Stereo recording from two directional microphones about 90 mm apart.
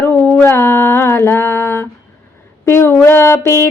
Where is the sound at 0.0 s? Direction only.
20° left (ahead or behind).